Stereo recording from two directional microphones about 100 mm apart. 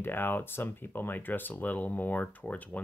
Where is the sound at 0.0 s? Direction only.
20° left (ahead or behind).